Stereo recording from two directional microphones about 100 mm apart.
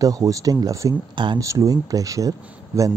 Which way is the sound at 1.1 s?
55° right (ahead or behind).